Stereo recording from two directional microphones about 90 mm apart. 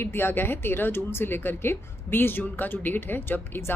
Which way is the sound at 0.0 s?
25° left (ahead or behind).